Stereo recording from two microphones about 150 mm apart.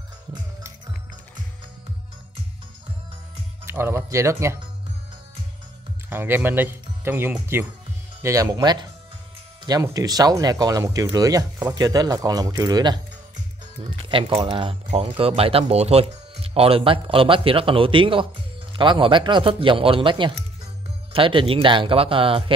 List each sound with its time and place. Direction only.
3.6 s speech: 15° right (ahead or behind)
6.0 s speech: 15° right (ahead or behind); by 22.4 s 35° right (ahead or behind)